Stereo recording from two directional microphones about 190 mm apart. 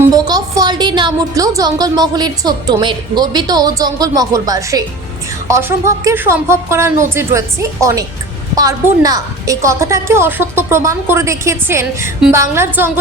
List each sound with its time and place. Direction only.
0.0 s a woman's voice: 20° right (ahead or behind)